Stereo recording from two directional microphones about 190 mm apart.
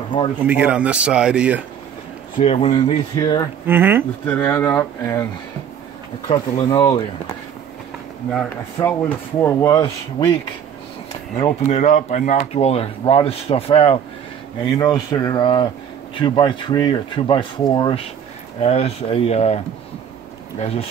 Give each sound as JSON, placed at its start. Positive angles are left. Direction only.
{"t": 0.4, "sound": "a man's voice", "side_deg": -5}
{"t": 2.3, "sound": "speech", "side_deg": 35}
{"t": 3.2, "sound": "speech", "side_deg": 20}
{"t": 3.6, "sound": "a man's voice", "side_deg": -10}
{"t": 4.4, "sound": "speech", "side_deg": 10}
{"t": 6.2, "sound": "speech", "side_deg": 25}
{"t": 8.3, "sound": "speech", "side_deg": 5}
{"t": 11.3, "sound": "speech", "side_deg": 35}
{"t": 14.8, "sound": "speech", "side_deg": 20}